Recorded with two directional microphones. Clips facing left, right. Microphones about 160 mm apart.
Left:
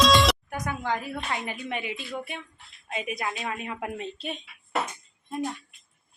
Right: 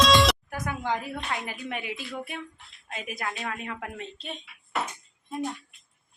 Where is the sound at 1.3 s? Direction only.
5° right (ahead or behind).